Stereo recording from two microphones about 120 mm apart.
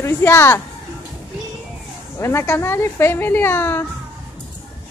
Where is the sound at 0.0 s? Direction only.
20° left (ahead or behind).